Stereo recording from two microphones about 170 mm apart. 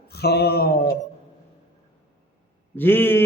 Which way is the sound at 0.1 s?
70° left (ahead or behind).